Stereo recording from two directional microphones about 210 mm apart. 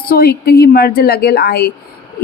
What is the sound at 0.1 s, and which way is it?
A woman's voice, 45° left (ahead or behind).